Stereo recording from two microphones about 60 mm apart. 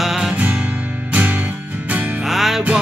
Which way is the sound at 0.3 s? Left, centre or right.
Right.